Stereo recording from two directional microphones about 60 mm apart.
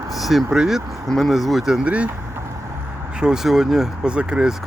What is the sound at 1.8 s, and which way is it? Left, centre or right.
Speech, centre.